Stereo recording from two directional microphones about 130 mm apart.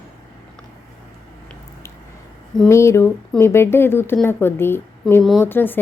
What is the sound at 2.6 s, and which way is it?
A woman's voice, 20° left (ahead or behind).